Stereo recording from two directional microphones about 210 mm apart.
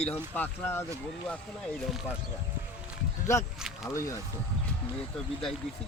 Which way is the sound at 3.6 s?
Centre (ahead or behind).